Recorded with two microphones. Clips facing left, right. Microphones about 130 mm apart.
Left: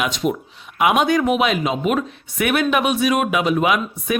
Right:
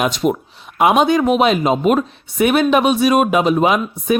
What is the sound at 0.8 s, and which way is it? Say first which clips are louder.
Speech: right 3 dB; 30° right (ahead or behind).